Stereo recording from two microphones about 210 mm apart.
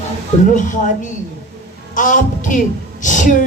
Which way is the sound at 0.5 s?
40° left (ahead or behind).